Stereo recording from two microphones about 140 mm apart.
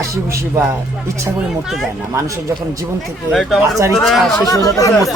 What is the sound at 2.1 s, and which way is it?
Speech, 20° right (ahead or behind).